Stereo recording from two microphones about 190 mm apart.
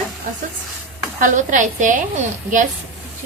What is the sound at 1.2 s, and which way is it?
A woman's voice, 40° right (ahead or behind).